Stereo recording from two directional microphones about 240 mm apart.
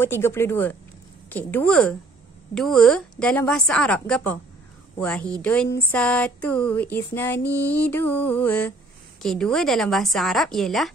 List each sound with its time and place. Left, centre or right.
0.0 s music: centre
1.3 s a woman's voice: centre
5.9 s music: centre
9.2 s a woman's voice: centre